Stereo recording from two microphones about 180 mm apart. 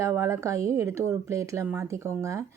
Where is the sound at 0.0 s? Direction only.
15° right (ahead or behind).